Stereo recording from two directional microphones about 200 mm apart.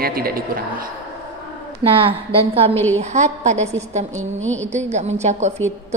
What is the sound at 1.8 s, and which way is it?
Speech, 25° right (ahead or behind).